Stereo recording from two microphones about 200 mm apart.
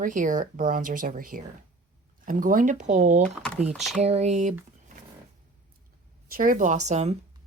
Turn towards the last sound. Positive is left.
turn(degrees=-35)  # may be behind; listen again after turning